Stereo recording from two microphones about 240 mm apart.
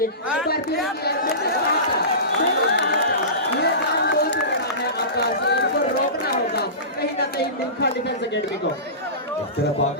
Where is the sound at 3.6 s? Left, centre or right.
Left.